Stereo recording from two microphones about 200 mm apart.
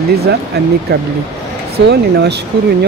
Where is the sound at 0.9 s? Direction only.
50° right (ahead or behind).